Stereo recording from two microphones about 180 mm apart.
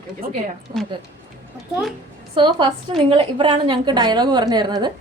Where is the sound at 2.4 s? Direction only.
25° right (ahead or behind).